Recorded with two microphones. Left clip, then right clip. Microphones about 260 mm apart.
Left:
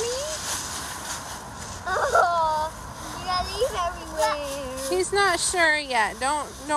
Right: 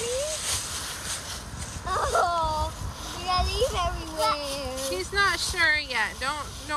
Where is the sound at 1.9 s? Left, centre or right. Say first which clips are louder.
Left 4 dB; left.